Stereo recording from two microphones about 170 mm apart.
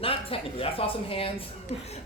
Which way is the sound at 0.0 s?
35° left (ahead or behind).